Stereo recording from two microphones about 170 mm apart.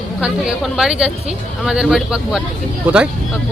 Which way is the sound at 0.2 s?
5° right (ahead or behind).